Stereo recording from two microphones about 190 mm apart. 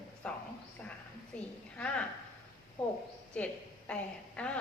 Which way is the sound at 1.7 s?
5° left (ahead or behind).